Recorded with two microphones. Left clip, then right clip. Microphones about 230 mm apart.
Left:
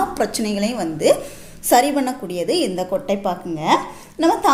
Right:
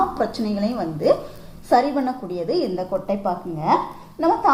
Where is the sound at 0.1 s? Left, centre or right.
Left.